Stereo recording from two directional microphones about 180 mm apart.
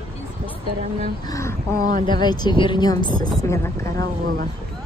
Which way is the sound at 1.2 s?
15° left (ahead or behind).